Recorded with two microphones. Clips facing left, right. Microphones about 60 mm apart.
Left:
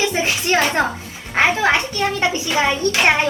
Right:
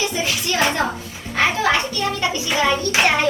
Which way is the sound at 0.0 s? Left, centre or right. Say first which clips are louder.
Left 3 dB; left.